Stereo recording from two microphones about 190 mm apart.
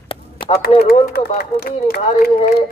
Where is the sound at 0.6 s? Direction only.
55° left (ahead or behind).